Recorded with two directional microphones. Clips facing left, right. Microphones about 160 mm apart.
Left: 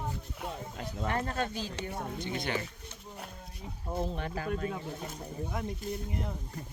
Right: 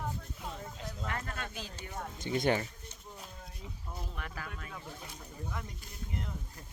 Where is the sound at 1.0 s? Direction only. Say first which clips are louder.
Left 9 dB; 30° left (ahead or behind).